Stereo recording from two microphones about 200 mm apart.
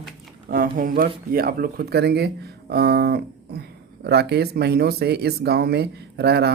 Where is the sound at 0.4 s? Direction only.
45° right (ahead or behind).